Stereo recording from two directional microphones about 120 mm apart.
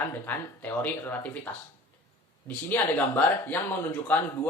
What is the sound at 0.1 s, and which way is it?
Speech, 15° left (ahead or behind).